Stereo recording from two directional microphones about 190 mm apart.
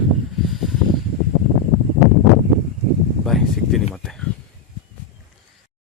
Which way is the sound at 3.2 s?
Centre (ahead or behind).